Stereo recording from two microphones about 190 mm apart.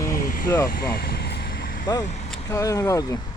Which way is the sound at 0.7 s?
55° left (ahead or behind).